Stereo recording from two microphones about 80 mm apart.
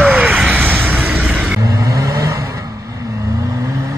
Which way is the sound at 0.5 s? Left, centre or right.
Right.